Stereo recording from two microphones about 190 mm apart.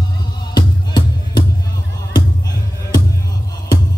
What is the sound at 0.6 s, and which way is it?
Music, 20° left (ahead or behind).